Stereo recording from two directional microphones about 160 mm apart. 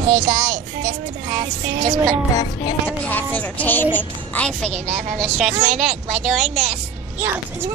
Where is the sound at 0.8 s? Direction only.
50° right (ahead or behind).